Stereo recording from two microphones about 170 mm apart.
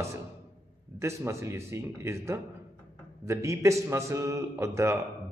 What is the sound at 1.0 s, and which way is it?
A man's voice, 15° right (ahead or behind).